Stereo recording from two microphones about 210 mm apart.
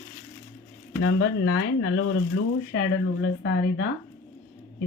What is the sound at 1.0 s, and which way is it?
Speech, 60° left (ahead or behind).